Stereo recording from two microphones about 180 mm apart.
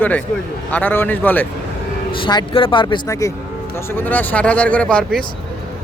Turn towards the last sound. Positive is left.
turn(degrees=5)  # may be behind; listen again after turning